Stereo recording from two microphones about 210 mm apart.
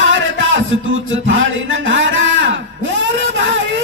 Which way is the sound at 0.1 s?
70° right (ahead or behind).